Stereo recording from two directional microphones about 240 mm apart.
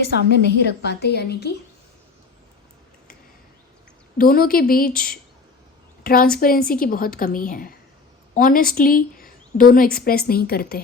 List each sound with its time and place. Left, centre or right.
0.0 s a woman's voice: left
4.2 s a woman's voice: left